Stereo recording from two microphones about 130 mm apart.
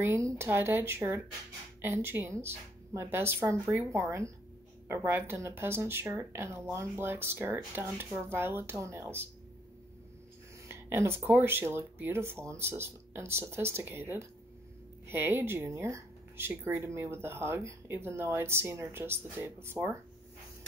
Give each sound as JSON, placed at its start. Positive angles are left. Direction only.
{"t": 0.0, "sound": "speech", "side_deg": -20}
{"t": 10.7, "sound": "speech", "side_deg": -20}